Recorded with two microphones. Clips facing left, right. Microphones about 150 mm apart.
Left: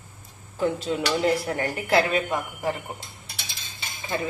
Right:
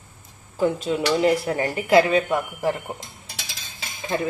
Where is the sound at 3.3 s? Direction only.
90° right.